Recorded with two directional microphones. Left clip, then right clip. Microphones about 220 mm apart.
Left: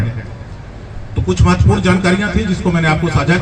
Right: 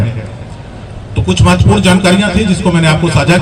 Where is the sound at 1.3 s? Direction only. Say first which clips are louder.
Right 5 dB; 45° right (ahead or behind).